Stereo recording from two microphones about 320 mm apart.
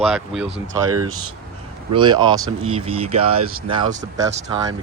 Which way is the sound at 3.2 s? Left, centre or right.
Right.